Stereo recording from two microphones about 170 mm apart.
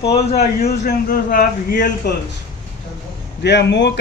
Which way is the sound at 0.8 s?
55° left (ahead or behind).